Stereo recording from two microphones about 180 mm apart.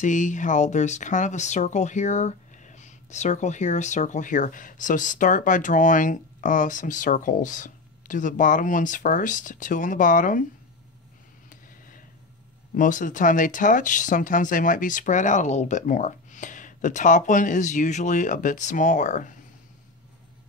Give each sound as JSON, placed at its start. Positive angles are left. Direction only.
{"t": 0.0, "sound": "speech", "side_deg": 45}
{"t": 12.7, "sound": "speech", "side_deg": 45}